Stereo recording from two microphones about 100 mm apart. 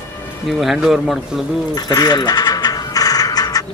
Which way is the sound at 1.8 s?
40° left (ahead or behind).